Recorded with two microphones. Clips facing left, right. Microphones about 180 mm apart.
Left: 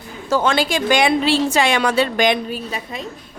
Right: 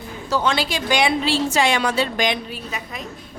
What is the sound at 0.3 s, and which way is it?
A woman's voice, 50° left (ahead or behind).